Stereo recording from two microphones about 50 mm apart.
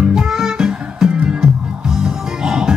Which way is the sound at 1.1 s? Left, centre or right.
Right.